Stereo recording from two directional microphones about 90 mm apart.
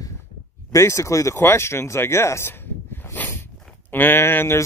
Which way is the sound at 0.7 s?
35° left (ahead or behind).